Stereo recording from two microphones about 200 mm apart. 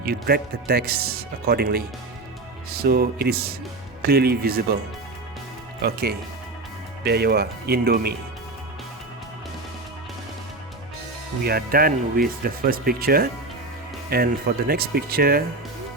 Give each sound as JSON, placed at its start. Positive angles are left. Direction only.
{"t": 0.0, "sound": "speech", "side_deg": -50}
{"t": 5.8, "sound": "speech", "side_deg": -50}
{"t": 11.4, "sound": "speech", "side_deg": -50}